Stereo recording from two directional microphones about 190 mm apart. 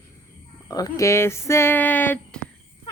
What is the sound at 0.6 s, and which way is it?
Speech, 20° left (ahead or behind).